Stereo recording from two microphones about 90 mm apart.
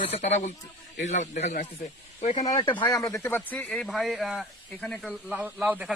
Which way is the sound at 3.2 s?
20° left (ahead or behind).